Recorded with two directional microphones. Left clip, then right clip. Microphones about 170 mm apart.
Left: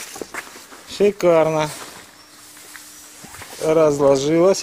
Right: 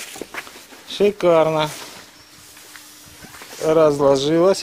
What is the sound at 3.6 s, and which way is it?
Speech, centre (ahead or behind).